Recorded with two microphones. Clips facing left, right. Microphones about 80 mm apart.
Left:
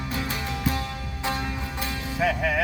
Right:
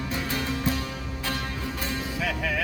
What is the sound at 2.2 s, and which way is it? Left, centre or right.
Music, left.